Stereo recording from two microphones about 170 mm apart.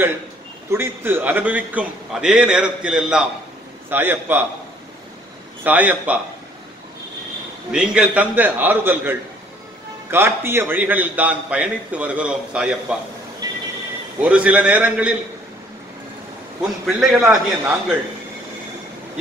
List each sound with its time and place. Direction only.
0.7 s a man's voice: 15° right (ahead or behind)
5.6 s a man's voice: 10° right (ahead or behind)
7.7 s a man's voice: 5° right (ahead or behind)
10.1 s a man's voice: 15° right (ahead or behind)
13.4 s music: 25° right (ahead or behind)
14.2 s a man's voice: 5° right (ahead or behind)
16.8 s a man's voice: 5° right (ahead or behind)